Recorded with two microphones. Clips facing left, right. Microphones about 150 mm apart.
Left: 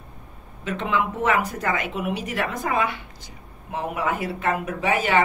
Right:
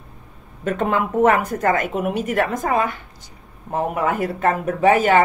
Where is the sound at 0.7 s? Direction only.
50° right (ahead or behind).